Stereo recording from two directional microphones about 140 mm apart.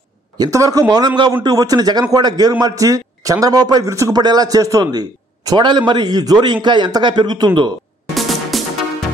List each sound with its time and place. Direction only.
0.4 s a man's voice: 25° right (ahead or behind)
8.1 s music: centre (ahead or behind)